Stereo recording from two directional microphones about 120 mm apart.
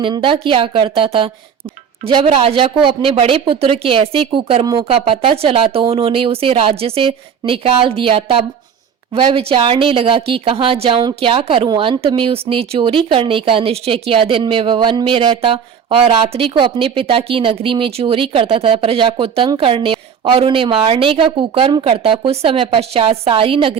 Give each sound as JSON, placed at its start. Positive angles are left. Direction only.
{"t": 0.0, "sound": "speech", "side_deg": -45}